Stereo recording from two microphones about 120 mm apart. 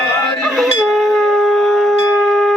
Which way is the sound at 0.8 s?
Centre (ahead or behind).